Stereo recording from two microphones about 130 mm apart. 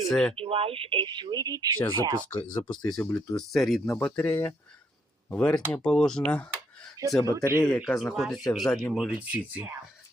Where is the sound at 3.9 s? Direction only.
10° left (ahead or behind).